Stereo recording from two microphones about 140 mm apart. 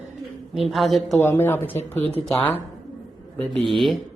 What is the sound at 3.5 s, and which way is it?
Speech, 40° right (ahead or behind).